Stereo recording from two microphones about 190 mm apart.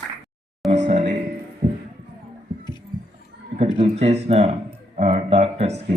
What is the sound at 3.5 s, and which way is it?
Speech, 35° right (ahead or behind).